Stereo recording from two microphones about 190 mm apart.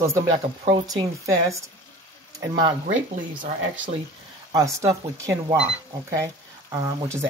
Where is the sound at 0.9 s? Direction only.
15° right (ahead or behind).